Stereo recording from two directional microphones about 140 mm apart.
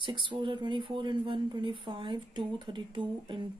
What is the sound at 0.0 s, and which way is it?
Speech, 35° right (ahead or behind).